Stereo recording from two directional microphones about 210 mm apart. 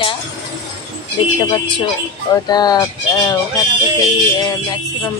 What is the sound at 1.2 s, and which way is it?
Speech, 25° left (ahead or behind).